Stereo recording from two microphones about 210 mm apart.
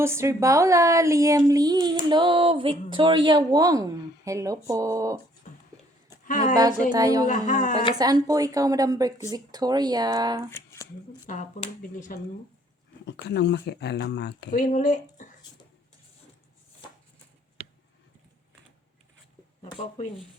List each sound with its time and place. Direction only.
0.0 s speech: 10° right (ahead or behind)
6.4 s speech: 20° right (ahead or behind)
7.3 s speech: 35° left (ahead or behind)
7.9 s speech: 20° right (ahead or behind)
10.5 s shuffling cards: 10° left (ahead or behind)
11.3 s speech: 35° left (ahead or behind)
13.2 s speech: 50° left (ahead or behind)
14.6 s speech: 35° left (ahead or behind)
19.6 s speech: 25° left (ahead or behind)